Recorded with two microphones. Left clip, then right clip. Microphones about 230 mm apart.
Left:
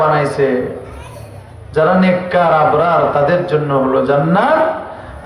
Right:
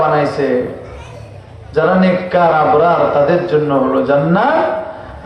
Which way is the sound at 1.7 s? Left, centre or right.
Left.